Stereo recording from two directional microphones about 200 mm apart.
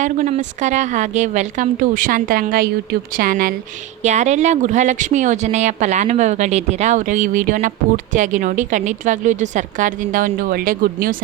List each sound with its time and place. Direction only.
0.0 s speech: 35° right (ahead or behind)